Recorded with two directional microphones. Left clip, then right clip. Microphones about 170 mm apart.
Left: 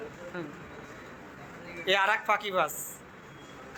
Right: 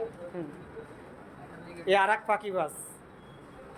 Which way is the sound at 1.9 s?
20° right (ahead or behind).